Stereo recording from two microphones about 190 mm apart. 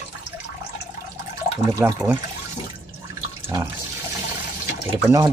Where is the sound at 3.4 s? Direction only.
15° right (ahead or behind).